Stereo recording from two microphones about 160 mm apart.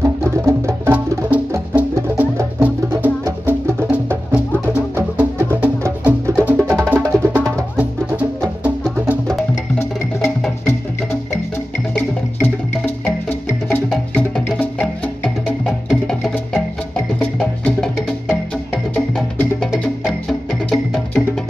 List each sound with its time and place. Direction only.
0.0 s music: 15° right (ahead or behind)
10.6 s music: 15° left (ahead or behind)
12.4 s music: 15° left (ahead or behind)
18.9 s music: 5° left (ahead or behind)